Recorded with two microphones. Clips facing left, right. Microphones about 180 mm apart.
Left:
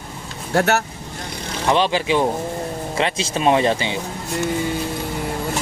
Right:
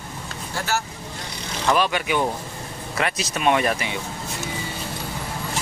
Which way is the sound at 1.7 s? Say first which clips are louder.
Left 3 dB; 25° left (ahead or behind).